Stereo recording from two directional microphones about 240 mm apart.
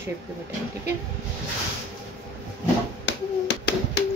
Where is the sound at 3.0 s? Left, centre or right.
Left.